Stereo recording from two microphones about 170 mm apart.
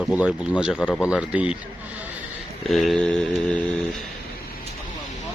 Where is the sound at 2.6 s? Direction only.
Centre (ahead or behind).